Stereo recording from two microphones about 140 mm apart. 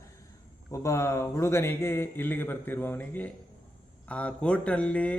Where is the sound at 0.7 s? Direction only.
20° left (ahead or behind).